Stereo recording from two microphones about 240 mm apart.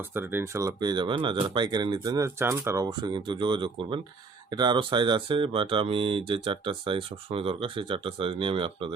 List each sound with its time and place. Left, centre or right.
0.0 s speech: centre